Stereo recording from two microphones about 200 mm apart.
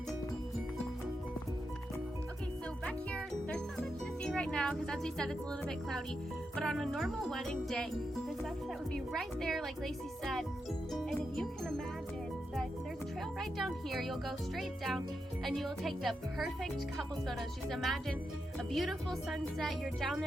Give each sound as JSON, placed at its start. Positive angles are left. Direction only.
{"t": 2.8, "sound": "music", "side_deg": 5}
{"t": 6.6, "sound": "a child's voice", "side_deg": 0}
{"t": 8.9, "sound": "a child's voice", "side_deg": 0}
{"t": 13.4, "sound": "a child's voice", "side_deg": 0}